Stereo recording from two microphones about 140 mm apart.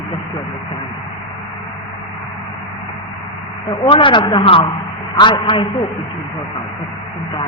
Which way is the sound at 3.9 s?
40° left (ahead or behind).